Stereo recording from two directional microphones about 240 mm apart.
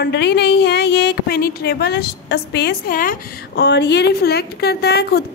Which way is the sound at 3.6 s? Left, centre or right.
Left.